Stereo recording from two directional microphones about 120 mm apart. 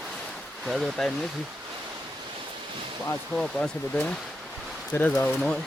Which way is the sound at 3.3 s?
5° left (ahead or behind).